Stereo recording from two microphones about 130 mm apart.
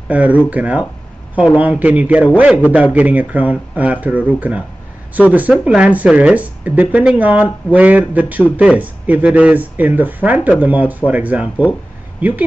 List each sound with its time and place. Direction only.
0.1 s speech: 10° right (ahead or behind)